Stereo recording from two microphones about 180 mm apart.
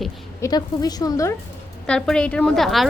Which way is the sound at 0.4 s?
20° left (ahead or behind).